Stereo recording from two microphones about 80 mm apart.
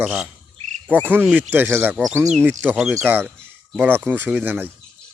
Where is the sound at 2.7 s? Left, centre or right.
Centre.